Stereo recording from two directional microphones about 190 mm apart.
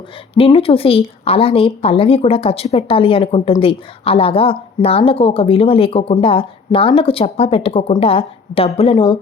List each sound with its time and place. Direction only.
0.3 s speech: 30° left (ahead or behind)